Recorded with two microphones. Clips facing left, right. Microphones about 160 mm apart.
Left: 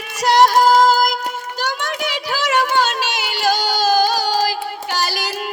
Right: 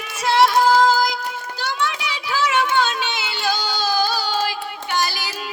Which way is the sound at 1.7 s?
45° left (ahead or behind).